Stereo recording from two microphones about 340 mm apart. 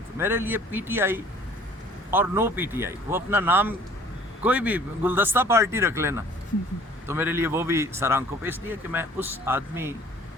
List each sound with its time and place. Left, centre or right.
0.2 s a man's voice: centre